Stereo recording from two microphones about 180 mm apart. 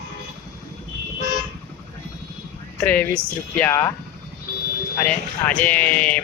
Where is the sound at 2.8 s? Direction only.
10° left (ahead or behind).